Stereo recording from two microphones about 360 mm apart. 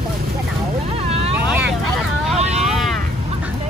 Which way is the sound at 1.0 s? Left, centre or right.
Centre.